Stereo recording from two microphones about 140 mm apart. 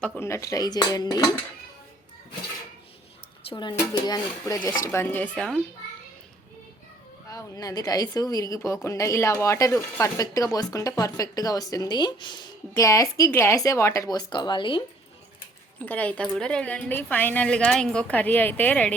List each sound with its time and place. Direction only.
0.2 s a woman's voice: 20° left (ahead or behind)
3.5 s a woman's voice: 35° left (ahead or behind)
4.9 s a woman's voice: 15° left (ahead or behind)
7.3 s a woman's voice: 25° left (ahead or behind)
15.8 s a woman's voice: 10° left (ahead or behind)